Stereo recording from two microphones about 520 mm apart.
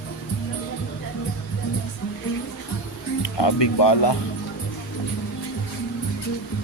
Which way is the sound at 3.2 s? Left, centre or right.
Left.